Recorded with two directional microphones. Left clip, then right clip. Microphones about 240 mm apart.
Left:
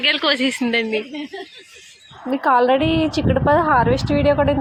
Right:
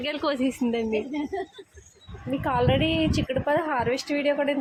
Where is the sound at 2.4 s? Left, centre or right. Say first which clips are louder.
Left 9 dB; centre.